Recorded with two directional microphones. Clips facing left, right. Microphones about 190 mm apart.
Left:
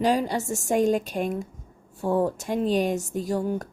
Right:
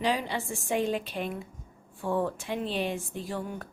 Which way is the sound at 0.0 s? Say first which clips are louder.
Left 6 dB; 45° left (ahead or behind).